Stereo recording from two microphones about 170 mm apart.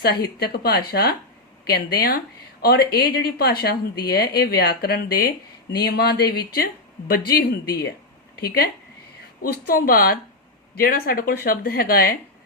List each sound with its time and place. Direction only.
0.0 s speech: 70° left (ahead or behind)